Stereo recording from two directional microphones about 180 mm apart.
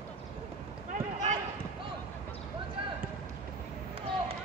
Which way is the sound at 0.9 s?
45° right (ahead or behind).